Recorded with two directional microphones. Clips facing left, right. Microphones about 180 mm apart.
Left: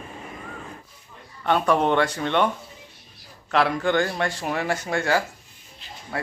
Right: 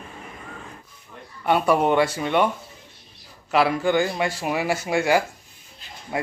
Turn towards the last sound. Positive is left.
turn(degrees=-15)  # may be behind; listen again after turning